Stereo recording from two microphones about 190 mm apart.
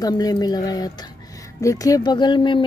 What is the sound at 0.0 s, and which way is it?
Speech, 20° left (ahead or behind).